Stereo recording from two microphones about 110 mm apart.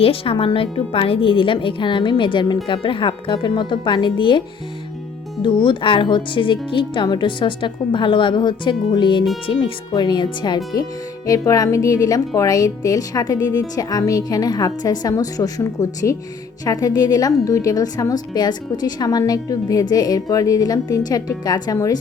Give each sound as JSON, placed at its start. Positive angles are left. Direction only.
{"t": 0.0, "sound": "a woman's voice", "side_deg": 55}